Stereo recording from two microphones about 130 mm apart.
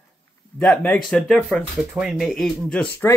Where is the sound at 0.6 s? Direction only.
10° left (ahead or behind).